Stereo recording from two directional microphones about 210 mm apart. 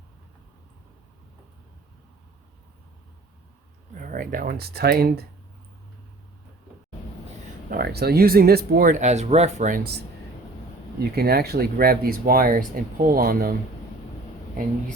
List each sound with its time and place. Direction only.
3.9 s speech: 40° right (ahead or behind)
7.7 s speech: 50° right (ahead or behind)
11.1 s speech: 45° right (ahead or behind)